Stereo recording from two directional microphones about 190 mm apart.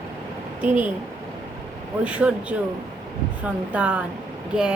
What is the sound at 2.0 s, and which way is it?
Speech, 5° right (ahead or behind).